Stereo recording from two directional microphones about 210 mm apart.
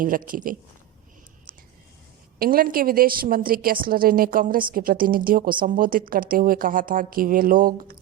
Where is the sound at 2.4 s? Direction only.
45° right (ahead or behind).